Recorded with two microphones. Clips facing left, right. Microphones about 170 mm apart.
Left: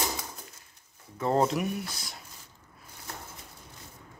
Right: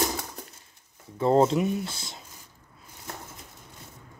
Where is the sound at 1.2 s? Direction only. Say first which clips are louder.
Right 5 dB; 30° right (ahead or behind).